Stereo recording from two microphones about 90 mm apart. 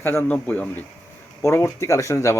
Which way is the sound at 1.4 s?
30° left (ahead or behind).